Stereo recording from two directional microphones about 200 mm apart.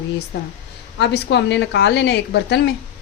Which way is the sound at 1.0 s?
60° left (ahead or behind).